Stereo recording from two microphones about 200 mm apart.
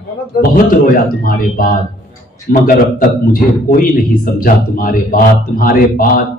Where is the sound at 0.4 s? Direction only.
45° left (ahead or behind).